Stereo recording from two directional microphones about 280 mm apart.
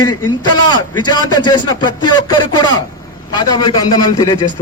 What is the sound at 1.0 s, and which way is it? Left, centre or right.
A man's voice, centre.